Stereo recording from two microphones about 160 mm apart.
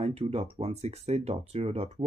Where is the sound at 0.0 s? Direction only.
40° right (ahead or behind).